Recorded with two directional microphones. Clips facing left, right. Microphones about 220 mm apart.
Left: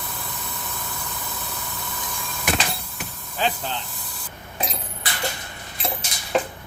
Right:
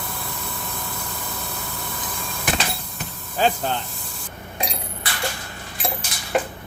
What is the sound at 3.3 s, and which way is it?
Speech, 45° right (ahead or behind).